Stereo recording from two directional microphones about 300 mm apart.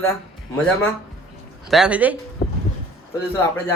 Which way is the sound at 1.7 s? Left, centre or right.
Centre.